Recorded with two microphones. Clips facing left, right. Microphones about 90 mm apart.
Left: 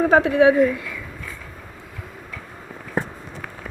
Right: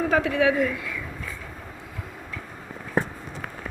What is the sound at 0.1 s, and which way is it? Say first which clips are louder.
Speech: left 6 dB; 25° left (ahead or behind).